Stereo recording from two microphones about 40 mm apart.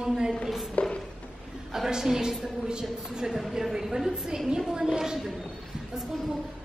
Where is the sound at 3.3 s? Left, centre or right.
Centre.